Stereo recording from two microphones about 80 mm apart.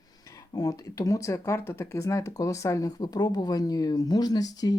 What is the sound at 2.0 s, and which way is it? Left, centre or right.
Speech, left.